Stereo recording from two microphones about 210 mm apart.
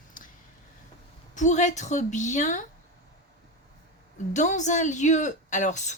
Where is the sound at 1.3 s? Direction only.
35° left (ahead or behind).